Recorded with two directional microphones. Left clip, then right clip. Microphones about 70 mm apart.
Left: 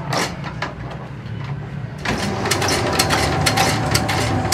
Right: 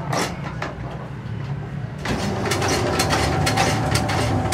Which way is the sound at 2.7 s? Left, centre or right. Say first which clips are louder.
Left 3 dB; centre.